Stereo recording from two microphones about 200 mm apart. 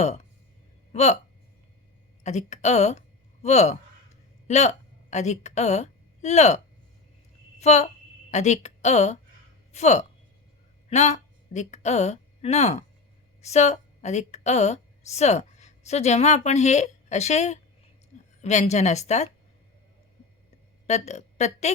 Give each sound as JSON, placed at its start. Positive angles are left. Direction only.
{"t": 0.9, "sound": "speech", "side_deg": 35}
{"t": 2.2, "sound": "a woman's voice", "side_deg": 35}
{"t": 7.6, "sound": "a woman's voice", "side_deg": 35}
{"t": 18.1, "sound": "a sound", "side_deg": 35}
{"t": 18.4, "sound": "speech", "side_deg": 35}
{"t": 20.8, "sound": "a woman's voice", "side_deg": 35}